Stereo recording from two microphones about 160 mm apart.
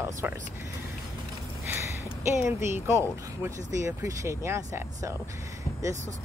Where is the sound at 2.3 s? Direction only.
15° right (ahead or behind).